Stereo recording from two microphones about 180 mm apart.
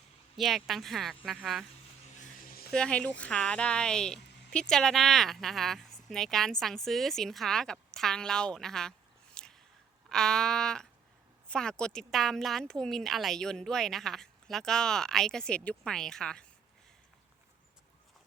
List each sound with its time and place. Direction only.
0.3 s speech: centre (ahead or behind)
2.4 s a sound: 55° left (ahead or behind)
2.7 s speech: 5° left (ahead or behind)